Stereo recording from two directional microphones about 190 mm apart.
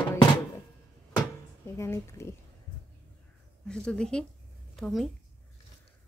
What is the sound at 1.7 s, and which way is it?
Speech, 15° left (ahead or behind).